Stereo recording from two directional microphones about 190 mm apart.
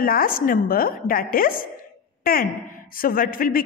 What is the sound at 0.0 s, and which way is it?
A woman's voice, 50° left (ahead or behind).